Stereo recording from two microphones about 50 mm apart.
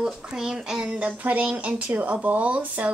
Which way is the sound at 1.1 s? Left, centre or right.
Right.